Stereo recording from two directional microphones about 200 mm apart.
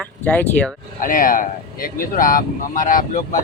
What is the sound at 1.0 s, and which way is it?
Speech, 45° left (ahead or behind).